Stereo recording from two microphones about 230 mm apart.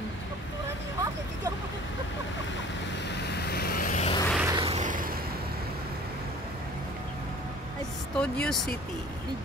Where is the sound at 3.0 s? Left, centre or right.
Left.